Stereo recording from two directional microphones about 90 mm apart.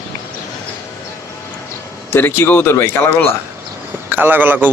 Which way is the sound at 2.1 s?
25° left (ahead or behind).